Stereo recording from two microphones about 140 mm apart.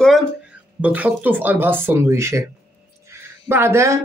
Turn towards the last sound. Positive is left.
turn(degrees=-20)  # may be behind; listen again after turning